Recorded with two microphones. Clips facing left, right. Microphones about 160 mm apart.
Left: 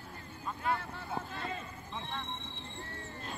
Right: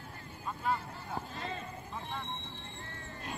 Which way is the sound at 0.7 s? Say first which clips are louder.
Left 1 dB; 65° left (ahead or behind).